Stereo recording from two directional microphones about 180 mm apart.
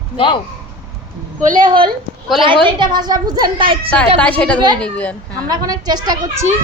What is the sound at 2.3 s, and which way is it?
A woman's voice, 25° right (ahead or behind).